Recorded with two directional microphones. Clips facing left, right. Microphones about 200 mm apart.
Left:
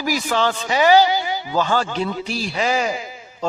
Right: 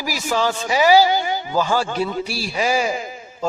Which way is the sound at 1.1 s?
50° right (ahead or behind).